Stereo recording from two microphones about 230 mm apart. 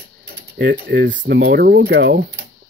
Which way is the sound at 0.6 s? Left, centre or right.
Right.